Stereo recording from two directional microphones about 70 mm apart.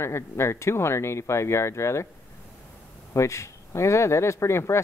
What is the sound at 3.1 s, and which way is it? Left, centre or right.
Speech, left.